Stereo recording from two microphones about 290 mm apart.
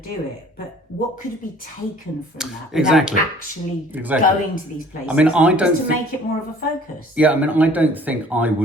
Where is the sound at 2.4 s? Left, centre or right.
Centre.